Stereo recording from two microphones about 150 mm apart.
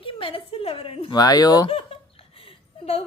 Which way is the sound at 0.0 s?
35° left (ahead or behind).